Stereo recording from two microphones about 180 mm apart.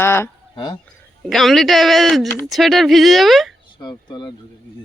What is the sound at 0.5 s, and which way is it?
Speech, 25° left (ahead or behind).